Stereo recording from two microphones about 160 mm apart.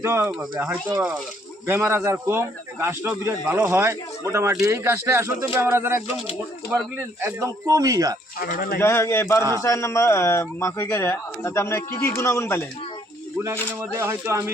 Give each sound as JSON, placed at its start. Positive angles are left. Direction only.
{"t": 0.0, "sound": "a man's voice", "side_deg": -15}
{"t": 8.4, "sound": "speech", "side_deg": 65}
{"t": 8.8, "sound": "speech", "side_deg": 15}
{"t": 13.9, "sound": "a man's voice", "side_deg": -15}